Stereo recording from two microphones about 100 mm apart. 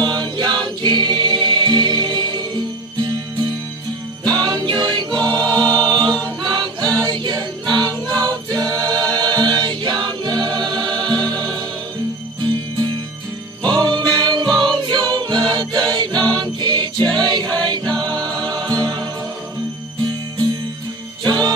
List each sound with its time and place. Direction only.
0.0 s music: 50° right (ahead or behind)
4.3 s music: 45° right (ahead or behind)
14.6 s choir: 50° right (ahead or behind)
16.3 s music: 45° right (ahead or behind)
21.2 s music: 45° right (ahead or behind)